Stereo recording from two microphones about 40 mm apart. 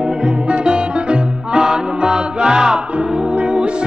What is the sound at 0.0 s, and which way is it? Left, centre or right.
Music, right.